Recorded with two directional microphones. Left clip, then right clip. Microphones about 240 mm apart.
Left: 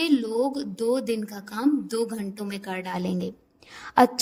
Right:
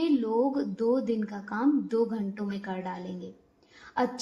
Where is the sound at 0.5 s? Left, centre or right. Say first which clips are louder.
Left 2 dB; left.